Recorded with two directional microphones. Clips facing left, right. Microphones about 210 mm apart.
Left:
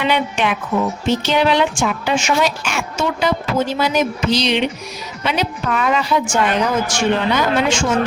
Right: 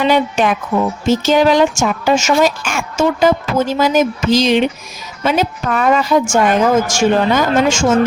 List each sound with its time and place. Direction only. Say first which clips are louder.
0.0 s a woman's voice: right 5 dB; 40° right (ahead or behind)